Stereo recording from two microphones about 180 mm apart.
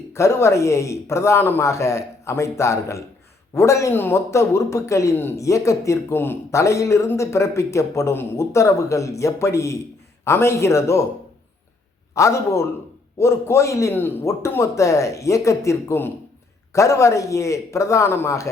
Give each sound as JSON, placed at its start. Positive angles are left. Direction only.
{"t": 0.1, "sound": "a man's voice", "side_deg": 15}
{"t": 12.1, "sound": "a man's voice", "side_deg": 15}